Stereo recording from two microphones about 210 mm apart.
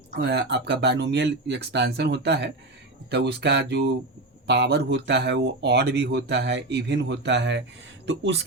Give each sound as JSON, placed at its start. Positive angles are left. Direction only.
{"t": 0.2, "sound": "speech", "side_deg": -50}